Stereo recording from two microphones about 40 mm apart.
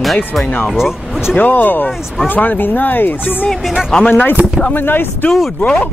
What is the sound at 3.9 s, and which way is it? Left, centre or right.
Speech, left.